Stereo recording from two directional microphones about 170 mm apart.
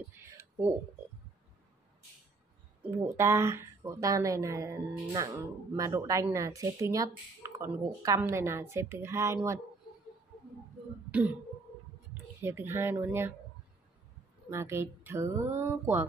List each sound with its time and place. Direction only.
0.2 s a sound: 15° right (ahead or behind)
2.8 s a woman's voice: 15° right (ahead or behind)
11.1 s throat clearing: 10° right (ahead or behind)
12.1 s speech: 15° right (ahead or behind)
14.5 s a woman's voice: 15° right (ahead or behind)